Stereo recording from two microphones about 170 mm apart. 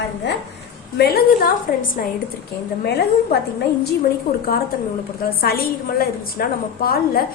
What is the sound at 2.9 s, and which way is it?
Speech, 70° left (ahead or behind).